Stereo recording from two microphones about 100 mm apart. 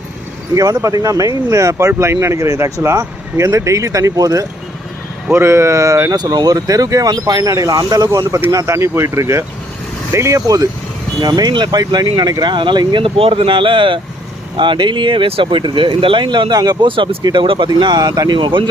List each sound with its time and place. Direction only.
0.5 s speech: 35° right (ahead or behind)
6.1 s speech: 45° right (ahead or behind)
13.1 s speech: 70° right (ahead or behind)
17.7 s speech: 45° right (ahead or behind)